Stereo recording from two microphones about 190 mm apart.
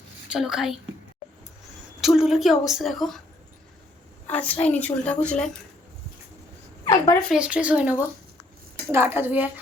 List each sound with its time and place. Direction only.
0.3 s a woman's voice: centre (ahead or behind)
2.0 s a woman's voice: centre (ahead or behind)
4.3 s a woman's voice: 10° left (ahead or behind)
6.8 s a woman's voice: 20° left (ahead or behind)
7.3 s speech: 5° right (ahead or behind)